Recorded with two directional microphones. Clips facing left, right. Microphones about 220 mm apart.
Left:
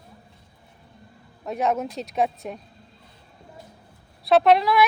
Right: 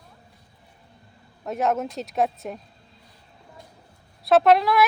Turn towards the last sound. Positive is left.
turn(degrees=0)  # may be behind; listen again after turning